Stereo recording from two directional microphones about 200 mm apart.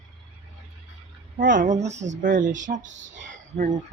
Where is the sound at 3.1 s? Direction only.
40° right (ahead or behind).